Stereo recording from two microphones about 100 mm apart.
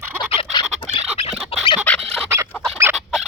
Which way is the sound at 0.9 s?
70° left (ahead or behind).